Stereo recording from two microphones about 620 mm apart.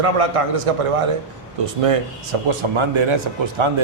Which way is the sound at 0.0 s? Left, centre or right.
Right.